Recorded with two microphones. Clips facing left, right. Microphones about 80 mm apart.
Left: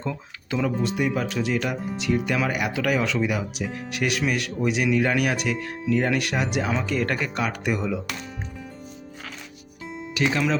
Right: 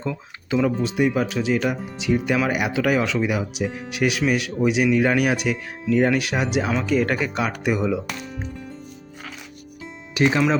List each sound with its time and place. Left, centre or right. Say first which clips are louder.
0.0 s speech: right 2 dB; centre
10.2 s speech: right 5 dB; right